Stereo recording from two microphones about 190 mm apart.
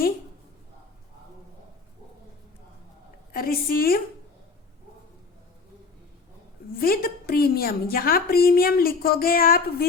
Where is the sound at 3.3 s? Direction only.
50° left (ahead or behind).